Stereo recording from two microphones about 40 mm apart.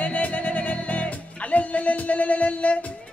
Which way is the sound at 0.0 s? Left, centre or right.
Left.